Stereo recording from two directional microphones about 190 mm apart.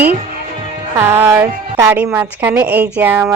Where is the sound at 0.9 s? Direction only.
10° right (ahead or behind).